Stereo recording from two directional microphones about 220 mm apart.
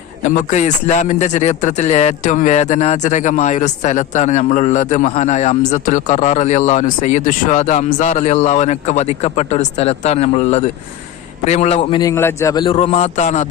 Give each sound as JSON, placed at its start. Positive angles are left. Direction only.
{"t": 0.2, "sound": "a man's voice", "side_deg": 35}